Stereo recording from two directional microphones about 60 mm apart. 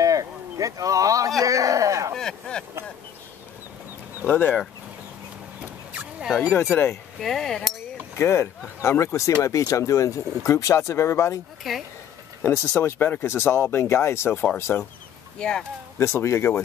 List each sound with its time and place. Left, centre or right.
0.0 s a sound: right
1.4 s speech: right
2.1 s speech: centre
4.3 s speech: left
5.6 s a sound: centre
6.6 s speech: left
7.2 s speech: centre
8.2 s speech: left
11.7 s speech: centre
12.4 s speech: left
15.3 s speech: centre
16.0 s speech: left